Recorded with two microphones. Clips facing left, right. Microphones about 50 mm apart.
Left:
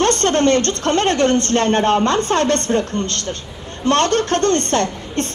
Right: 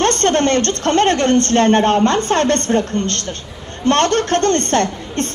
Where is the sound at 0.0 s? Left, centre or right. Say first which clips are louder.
Even; right.